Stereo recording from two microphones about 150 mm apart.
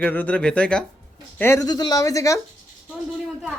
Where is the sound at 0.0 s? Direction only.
10° left (ahead or behind).